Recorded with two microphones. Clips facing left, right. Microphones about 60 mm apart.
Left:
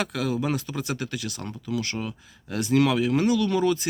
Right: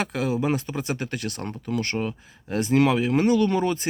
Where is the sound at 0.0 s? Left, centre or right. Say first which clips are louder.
Right 2 dB; right.